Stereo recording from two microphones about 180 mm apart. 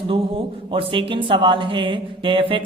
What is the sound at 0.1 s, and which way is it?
A woman's voice, 30° right (ahead or behind).